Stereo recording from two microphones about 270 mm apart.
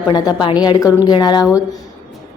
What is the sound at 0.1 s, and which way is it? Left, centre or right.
A woman's voice, centre.